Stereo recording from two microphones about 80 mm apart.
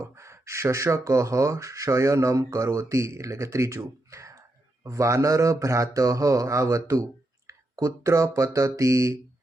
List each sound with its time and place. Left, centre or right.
0.0 s speech: right